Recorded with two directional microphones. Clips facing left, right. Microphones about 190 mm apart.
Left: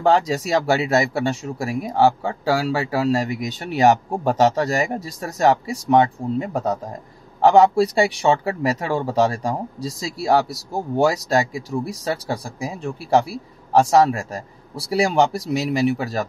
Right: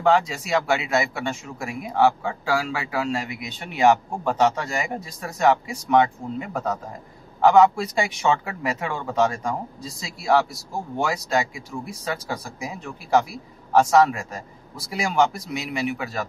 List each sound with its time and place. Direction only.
0.0 s speech: 40° left (ahead or behind)